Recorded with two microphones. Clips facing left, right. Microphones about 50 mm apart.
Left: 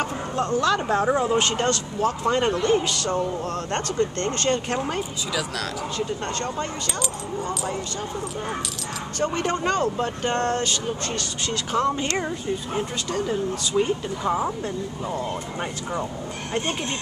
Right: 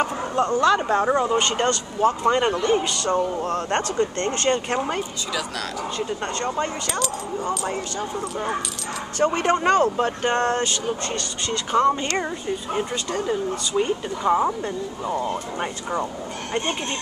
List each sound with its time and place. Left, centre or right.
0.0 s speech: centre
3.4 s speech: right
9.2 s speech: right
11.1 s speech: centre
14.6 s speech: centre